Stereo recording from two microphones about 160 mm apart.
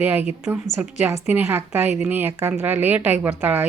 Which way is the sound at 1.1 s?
15° right (ahead or behind).